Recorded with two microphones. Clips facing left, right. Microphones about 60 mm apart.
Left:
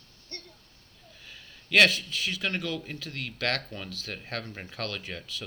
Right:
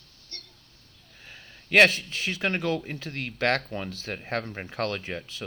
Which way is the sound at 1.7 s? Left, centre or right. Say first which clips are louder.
Right 3 dB; right.